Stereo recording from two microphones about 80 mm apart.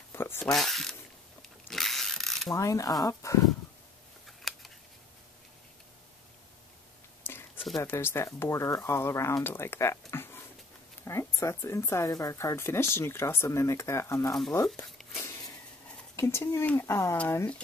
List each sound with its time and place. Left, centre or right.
0.1 s zipper: left
0.5 s speech: centre
1.7 s mechanisms: centre
2.5 s speech: left
4.5 s scissors: centre
7.2 s a sound: left
7.8 s speech: left
16.2 s speech: left